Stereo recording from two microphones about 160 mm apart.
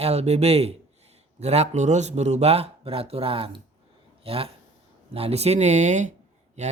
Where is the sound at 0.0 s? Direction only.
40° right (ahead or behind).